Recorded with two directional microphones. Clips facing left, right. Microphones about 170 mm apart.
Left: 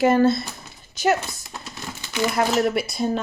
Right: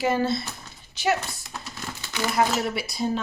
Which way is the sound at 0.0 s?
50° left (ahead or behind).